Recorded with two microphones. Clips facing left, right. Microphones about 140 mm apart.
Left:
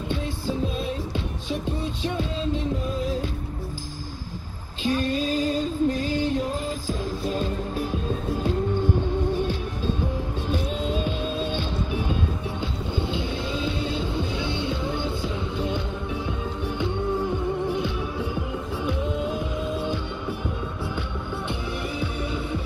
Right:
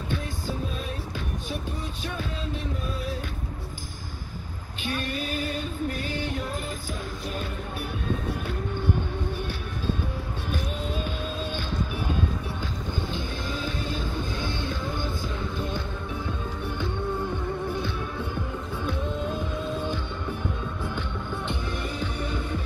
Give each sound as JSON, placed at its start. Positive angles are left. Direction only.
{"t": 4.8, "sound": "female singing", "side_deg": 30}
{"t": 11.1, "sound": "music", "side_deg": 25}
{"t": 13.0, "sound": "music", "side_deg": 20}
{"t": 19.8, "sound": "music", "side_deg": 15}
{"t": 22.0, "sound": "music", "side_deg": 10}